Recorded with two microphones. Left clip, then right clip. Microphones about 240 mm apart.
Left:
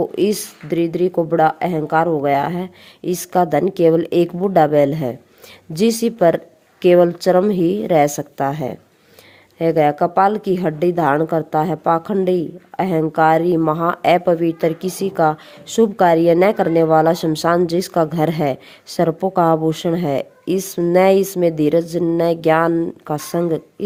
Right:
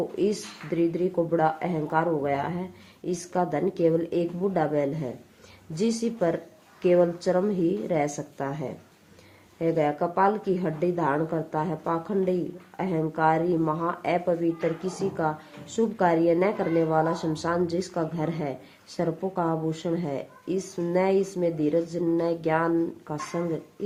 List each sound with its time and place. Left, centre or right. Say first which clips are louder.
0.2 s a woman's voice: left 8 dB; left